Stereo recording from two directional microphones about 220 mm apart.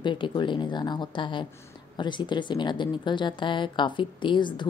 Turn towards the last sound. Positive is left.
turn(degrees=20)  # may be behind; listen again after turning